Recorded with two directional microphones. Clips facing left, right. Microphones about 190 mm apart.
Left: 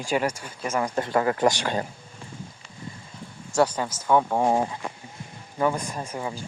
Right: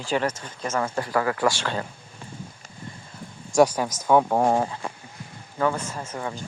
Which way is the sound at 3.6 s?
10° right (ahead or behind).